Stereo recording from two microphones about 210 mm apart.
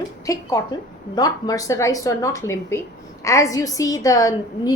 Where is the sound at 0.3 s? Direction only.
15° left (ahead or behind).